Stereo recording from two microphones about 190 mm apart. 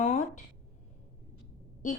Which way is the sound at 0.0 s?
40° left (ahead or behind).